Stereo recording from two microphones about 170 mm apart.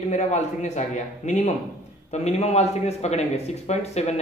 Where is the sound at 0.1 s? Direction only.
40° left (ahead or behind).